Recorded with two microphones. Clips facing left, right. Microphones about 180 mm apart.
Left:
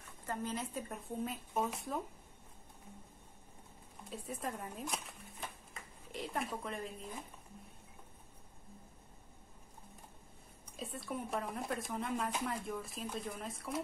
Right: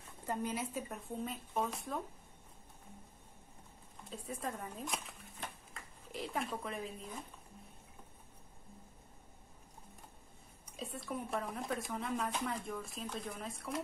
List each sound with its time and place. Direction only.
0.3 s speech: 15° right (ahead or behind); by 2.0 s 5° left (ahead or behind)
4.1 s speech: centre (ahead or behind)
10.8 s speech: centre (ahead or behind)